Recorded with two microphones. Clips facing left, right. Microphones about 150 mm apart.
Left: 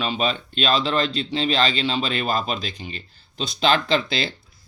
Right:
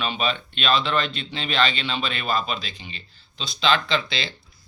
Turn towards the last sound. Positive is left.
turn(degrees=50)  # may be behind; listen again after turning